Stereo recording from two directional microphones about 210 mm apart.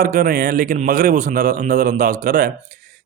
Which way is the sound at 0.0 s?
40° right (ahead or behind).